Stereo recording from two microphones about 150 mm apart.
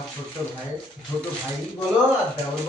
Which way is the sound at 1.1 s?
10° left (ahead or behind).